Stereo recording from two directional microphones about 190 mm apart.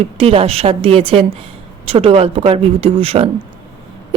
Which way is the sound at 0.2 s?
30° right (ahead or behind).